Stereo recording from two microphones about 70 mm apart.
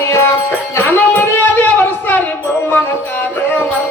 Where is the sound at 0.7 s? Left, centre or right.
Left.